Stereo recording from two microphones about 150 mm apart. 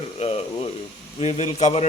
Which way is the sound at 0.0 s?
45° left (ahead or behind).